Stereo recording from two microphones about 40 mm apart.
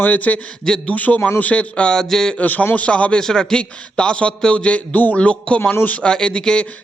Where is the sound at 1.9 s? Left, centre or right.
Centre.